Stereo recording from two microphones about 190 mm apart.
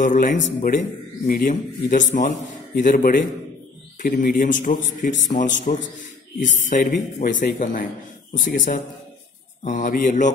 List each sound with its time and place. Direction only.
0.0 s a man's voice: 40° left (ahead or behind)